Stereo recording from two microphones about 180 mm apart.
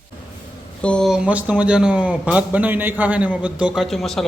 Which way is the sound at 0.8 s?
5° left (ahead or behind).